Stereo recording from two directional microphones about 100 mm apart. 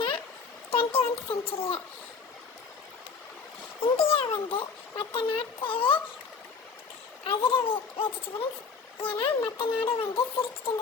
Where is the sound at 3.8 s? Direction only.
65° left (ahead or behind).